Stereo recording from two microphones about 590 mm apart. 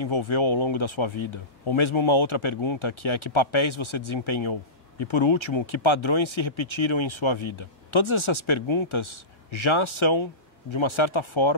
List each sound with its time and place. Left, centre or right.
0.0 s speech: left